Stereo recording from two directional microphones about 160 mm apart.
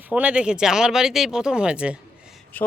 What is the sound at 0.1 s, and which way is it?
Speech, 10° right (ahead or behind).